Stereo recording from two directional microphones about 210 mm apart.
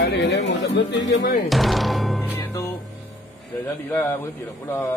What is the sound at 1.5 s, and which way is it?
Music, centre (ahead or behind).